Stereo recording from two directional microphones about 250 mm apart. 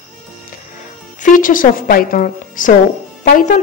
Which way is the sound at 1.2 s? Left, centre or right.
Left.